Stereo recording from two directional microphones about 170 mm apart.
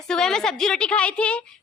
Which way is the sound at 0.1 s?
5° left (ahead or behind).